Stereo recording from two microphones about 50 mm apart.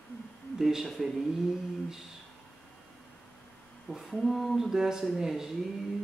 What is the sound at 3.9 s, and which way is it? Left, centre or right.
Speech, centre.